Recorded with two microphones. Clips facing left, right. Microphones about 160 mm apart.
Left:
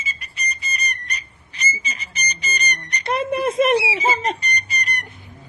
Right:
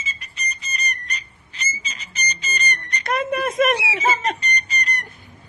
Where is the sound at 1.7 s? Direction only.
10° left (ahead or behind).